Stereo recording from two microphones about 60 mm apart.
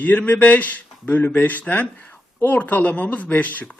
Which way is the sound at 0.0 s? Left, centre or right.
Left.